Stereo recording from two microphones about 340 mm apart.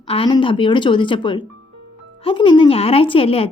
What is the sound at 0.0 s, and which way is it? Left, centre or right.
A woman's voice, centre.